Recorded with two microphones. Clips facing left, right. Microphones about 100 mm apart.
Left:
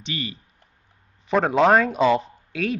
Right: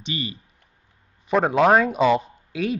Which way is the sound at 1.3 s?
5° right (ahead or behind).